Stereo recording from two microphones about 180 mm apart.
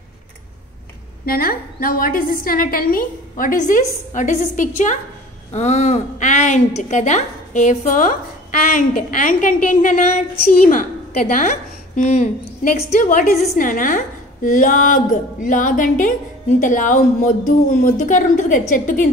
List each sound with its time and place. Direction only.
1.2 s a woman's voice: 55° left (ahead or behind)